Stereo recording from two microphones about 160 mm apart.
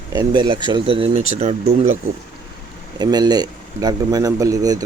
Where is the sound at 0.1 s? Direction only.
25° right (ahead or behind); by 1.5 s 40° right (ahead or behind).